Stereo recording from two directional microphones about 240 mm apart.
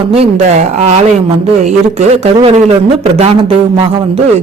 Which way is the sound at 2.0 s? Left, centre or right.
Right.